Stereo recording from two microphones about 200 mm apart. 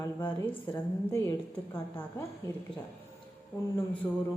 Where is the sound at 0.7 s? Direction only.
15° left (ahead or behind).